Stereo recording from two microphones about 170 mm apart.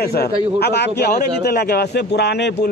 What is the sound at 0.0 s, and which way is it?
Speech, 70° left (ahead or behind).